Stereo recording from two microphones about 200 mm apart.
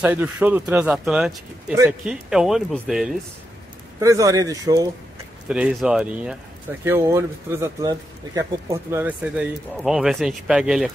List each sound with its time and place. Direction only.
0.0 s speech: 10° right (ahead or behind)
4.0 s speech: 15° right (ahead or behind)
5.5 s speech: 5° right (ahead or behind)